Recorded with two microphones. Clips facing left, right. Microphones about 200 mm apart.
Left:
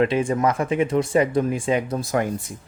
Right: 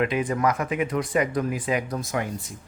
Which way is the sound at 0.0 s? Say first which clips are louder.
Left 4 dB; 30° left (ahead or behind).